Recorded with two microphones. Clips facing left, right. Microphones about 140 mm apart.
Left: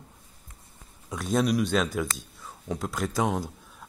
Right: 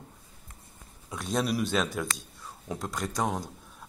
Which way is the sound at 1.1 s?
Centre (ahead or behind).